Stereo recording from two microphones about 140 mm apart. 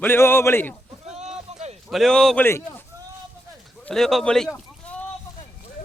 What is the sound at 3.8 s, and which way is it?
Speech, centre (ahead or behind).